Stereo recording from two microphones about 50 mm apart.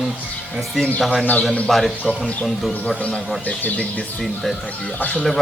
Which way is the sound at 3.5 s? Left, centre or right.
Left.